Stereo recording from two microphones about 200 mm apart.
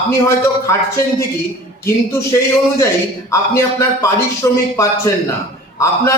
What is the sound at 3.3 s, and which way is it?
A man's voice, 15° left (ahead or behind).